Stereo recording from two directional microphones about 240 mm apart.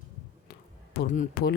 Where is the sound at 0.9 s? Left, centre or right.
Left.